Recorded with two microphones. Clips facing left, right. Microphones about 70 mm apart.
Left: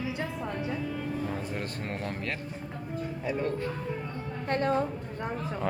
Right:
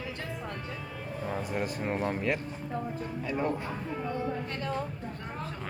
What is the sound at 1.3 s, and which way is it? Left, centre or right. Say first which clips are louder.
Speech: right 2 dB; centre.